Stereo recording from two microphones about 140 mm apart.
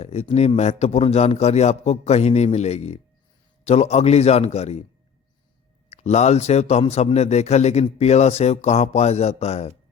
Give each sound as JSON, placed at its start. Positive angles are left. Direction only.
{"t": 0.0, "sound": "a man's voice", "side_deg": 50}
{"t": 6.0, "sound": "a man's voice", "side_deg": 50}